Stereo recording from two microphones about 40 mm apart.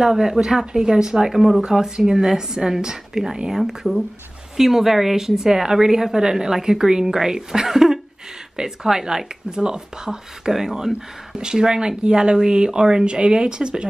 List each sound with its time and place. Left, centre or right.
0.0 s a woman's voice: centre
1.3 s a woman's voice: centre; by 13.8 s right